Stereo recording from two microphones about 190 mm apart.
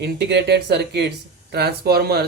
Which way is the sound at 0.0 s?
60° right (ahead or behind).